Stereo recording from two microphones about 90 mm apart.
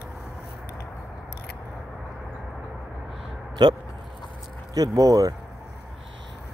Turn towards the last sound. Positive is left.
turn(degrees=-45)  # may be behind; listen again after turning